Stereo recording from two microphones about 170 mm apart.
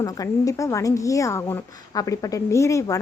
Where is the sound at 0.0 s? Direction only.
20° left (ahead or behind).